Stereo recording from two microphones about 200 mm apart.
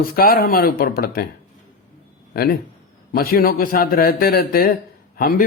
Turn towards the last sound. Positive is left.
turn(degrees=50)  # may be behind; listen again after turning